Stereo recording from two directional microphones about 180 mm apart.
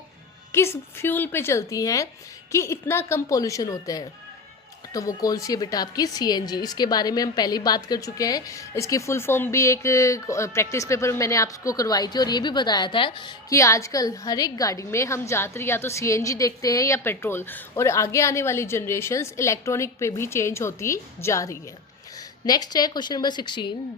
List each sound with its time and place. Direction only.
0.5 s a woman's voice: 15° left (ahead or behind)